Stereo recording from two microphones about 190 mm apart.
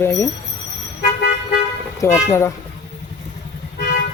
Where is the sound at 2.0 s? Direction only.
15° left (ahead or behind).